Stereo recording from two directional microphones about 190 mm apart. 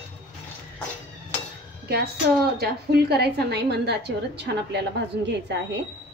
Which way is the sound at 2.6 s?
55° right (ahead or behind).